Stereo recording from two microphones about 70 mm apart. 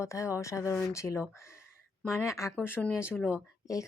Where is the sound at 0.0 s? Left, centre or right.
Left.